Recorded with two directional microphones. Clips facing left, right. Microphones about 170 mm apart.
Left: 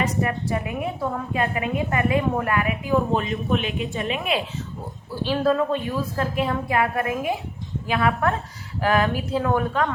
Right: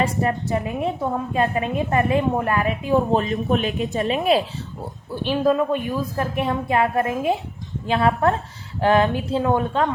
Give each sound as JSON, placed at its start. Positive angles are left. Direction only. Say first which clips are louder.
{"t": 0.0, "sound": "a woman's voice", "louder": "right 2 dB", "side_deg": -30}
{"t": 5.1, "sound": "a woman's voice", "louder": "right 2 dB", "side_deg": -20}